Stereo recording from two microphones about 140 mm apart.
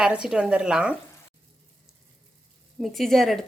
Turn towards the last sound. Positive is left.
turn(degrees=0)  # may be behind; listen again after turning